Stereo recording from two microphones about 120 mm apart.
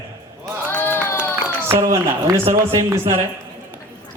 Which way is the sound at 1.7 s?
20° right (ahead or behind).